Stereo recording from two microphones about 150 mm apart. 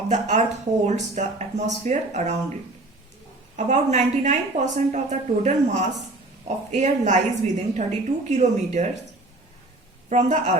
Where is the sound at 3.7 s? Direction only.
50° right (ahead or behind).